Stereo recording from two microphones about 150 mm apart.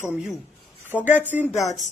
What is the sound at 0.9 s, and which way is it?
Speech, 10° left (ahead or behind).